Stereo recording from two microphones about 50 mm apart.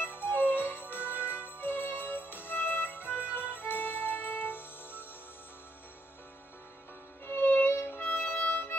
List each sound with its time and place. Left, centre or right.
0.0 s music: left
7.2 s music: left
8.1 s music: left